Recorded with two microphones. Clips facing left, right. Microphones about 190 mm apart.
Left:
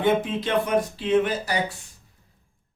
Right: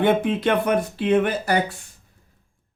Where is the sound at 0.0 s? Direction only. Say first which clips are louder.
Right 3 dB; 60° right (ahead or behind).